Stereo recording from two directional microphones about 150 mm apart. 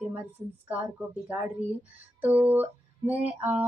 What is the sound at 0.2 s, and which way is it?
Speech, 10° right (ahead or behind).